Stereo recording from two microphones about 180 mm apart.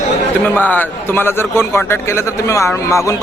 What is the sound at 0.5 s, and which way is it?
A man's voice, 10° left (ahead or behind).